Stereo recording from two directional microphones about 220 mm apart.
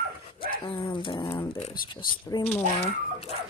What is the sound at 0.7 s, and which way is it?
Speech, 25° left (ahead or behind).